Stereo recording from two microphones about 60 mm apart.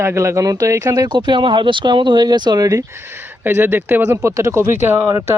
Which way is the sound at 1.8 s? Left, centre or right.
Right.